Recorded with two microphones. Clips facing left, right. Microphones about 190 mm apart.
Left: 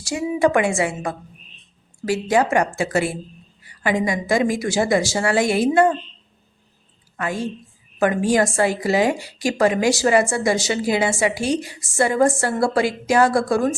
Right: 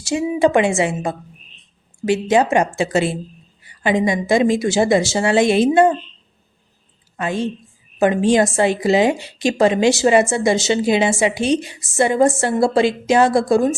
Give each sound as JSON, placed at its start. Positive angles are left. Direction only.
{"t": 0.0, "sound": "a woman's voice", "side_deg": -25}
{"t": 7.2, "sound": "a woman's voice", "side_deg": -20}